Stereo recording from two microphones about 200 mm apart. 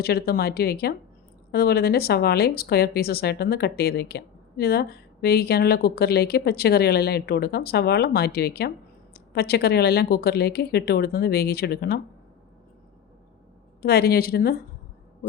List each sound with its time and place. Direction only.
0.0 s speech: 50° left (ahead or behind)
13.8 s speech: 50° left (ahead or behind)